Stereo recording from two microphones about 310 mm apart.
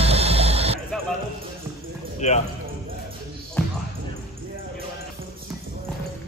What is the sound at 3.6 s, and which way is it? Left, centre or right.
Basketball bounce, centre.